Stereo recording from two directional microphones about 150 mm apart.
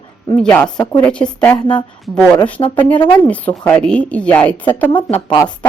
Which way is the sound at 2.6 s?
30° left (ahead or behind).